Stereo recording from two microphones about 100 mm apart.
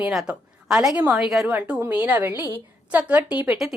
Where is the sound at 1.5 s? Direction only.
15° right (ahead or behind).